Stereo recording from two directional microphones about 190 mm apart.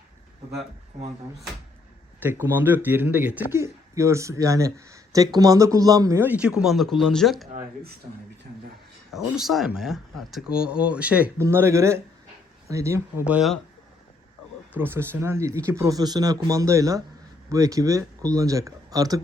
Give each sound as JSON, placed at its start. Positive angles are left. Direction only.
{"t": 2.2, "sound": "speech", "side_deg": -10}
{"t": 9.1, "sound": "speech", "side_deg": 0}
{"t": 14.8, "sound": "speech", "side_deg": -10}